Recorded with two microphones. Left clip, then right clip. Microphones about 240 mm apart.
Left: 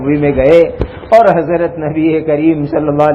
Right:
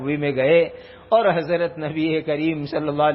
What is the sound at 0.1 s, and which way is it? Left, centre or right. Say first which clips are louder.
A man's voice: left 9 dB; right.